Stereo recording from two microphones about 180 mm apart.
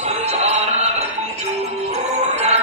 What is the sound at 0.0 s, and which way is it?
Music, 35° right (ahead or behind).